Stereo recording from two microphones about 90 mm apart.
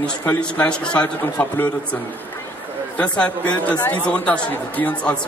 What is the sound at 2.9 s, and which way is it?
A man's voice, 15° left (ahead or behind).